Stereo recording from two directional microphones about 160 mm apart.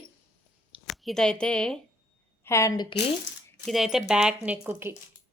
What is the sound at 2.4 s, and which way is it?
Speech, 20° left (ahead or behind).